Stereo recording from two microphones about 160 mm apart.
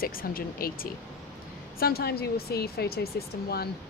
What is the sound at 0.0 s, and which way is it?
Speech, 65° left (ahead or behind).